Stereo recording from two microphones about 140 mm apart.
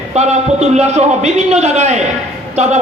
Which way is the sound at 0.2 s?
55° right (ahead or behind).